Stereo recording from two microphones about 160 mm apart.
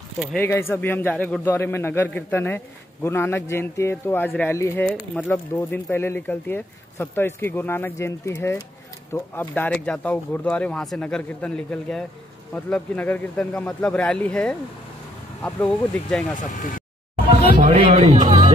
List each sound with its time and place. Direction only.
0.4 s a man's voice: 15° left (ahead or behind)
4.8 s a man's voice: 5° left (ahead or behind)
16.3 s speech: 55° left (ahead or behind)
17.6 s speech: 40° right (ahead or behind)
18.2 s speech: 25° right (ahead or behind)